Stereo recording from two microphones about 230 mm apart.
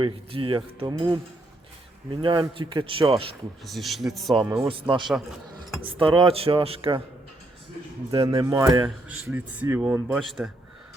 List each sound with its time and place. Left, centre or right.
0.0 s speech: right
3.6 s speech: centre
4.4 s speech: centre
8.3 s a man's voice: centre